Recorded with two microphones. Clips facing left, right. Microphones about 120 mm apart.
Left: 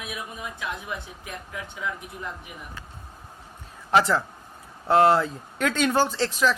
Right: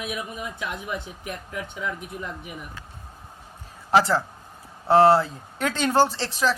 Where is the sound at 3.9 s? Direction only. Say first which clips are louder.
Right 1 dB; 30° right (ahead or behind).